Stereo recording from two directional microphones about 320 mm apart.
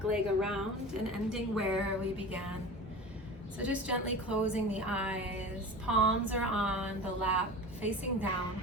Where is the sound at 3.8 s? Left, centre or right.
Left.